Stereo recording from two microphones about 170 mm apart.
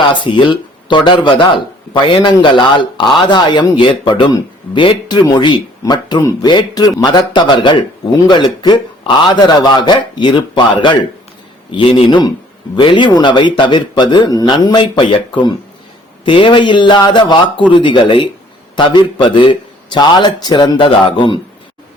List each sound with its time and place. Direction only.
0.1 s speech: 25° left (ahead or behind)